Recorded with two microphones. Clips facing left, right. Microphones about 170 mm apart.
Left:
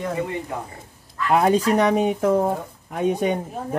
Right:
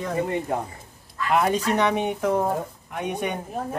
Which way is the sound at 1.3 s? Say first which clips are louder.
Left 4 dB; 35° left (ahead or behind).